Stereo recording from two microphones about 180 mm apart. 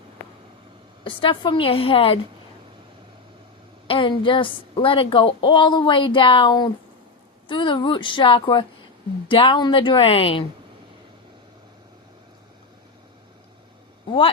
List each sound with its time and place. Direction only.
1.0 s a woman's voice: 30° left (ahead or behind)
3.8 s a woman's voice: 30° left (ahead or behind)